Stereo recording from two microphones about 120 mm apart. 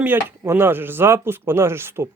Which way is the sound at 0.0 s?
15° right (ahead or behind).